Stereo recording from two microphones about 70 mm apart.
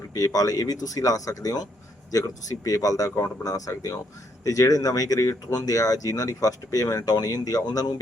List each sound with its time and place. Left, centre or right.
0.1 s speech: left